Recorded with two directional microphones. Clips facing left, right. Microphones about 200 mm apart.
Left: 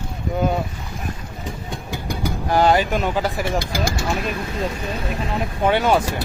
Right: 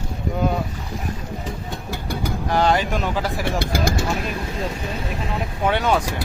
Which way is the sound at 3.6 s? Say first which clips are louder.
Right 2 dB; 55° right (ahead or behind).